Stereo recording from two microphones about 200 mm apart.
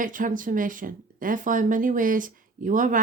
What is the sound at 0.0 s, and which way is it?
Speech, 40° right (ahead or behind).